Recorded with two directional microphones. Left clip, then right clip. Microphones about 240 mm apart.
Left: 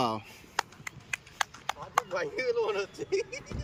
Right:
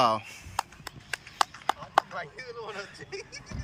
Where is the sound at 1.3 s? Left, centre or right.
Right.